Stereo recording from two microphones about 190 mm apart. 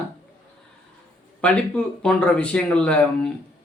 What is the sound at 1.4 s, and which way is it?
Speech, 5° left (ahead or behind).